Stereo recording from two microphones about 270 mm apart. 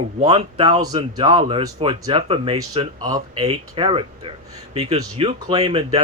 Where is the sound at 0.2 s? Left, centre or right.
Right.